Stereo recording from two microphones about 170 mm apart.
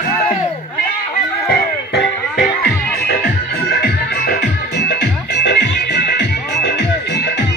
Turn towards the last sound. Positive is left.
turn(degrees=80)